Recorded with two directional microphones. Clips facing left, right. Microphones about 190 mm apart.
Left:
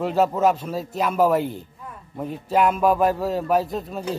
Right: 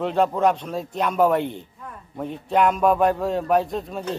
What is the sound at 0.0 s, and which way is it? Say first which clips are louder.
A man's voice: even; 5° left (ahead or behind).